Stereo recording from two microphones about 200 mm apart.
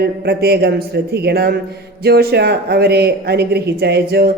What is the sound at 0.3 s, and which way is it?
Speech, 55° right (ahead or behind).